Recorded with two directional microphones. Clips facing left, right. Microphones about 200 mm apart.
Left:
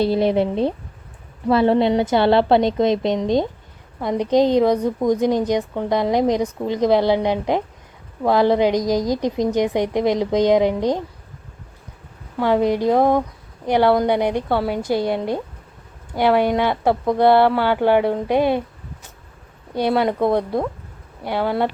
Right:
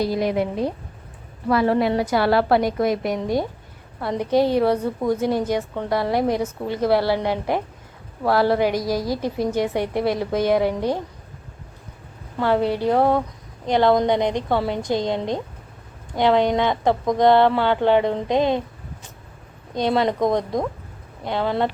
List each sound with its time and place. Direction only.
0.0 s a woman's voice: 30° left (ahead or behind)
12.4 s a woman's voice: 15° left (ahead or behind)
19.7 s a woman's voice: 10° left (ahead or behind)